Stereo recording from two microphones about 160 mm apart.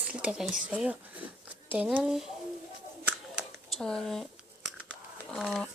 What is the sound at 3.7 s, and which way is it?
Speech, 5° left (ahead or behind).